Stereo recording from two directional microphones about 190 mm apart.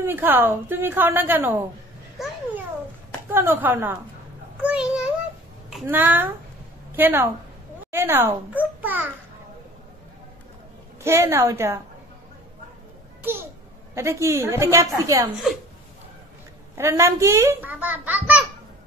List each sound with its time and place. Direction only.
0.0 s a child's voice: 10° right (ahead or behind)
2.2 s babbling: centre (ahead or behind)
3.3 s a child's voice: 10° right (ahead or behind)
11.1 s a child's voice: 15° right (ahead or behind)
13.2 s a child's voice: 10° right (ahead or behind)
16.7 s a child's voice: 15° right (ahead or behind)